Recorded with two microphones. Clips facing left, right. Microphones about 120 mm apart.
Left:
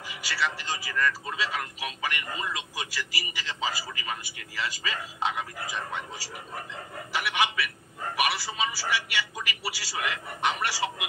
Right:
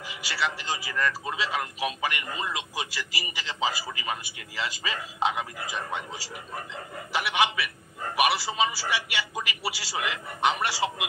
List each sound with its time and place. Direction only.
0.2 s a man's voice: 20° right (ahead or behind)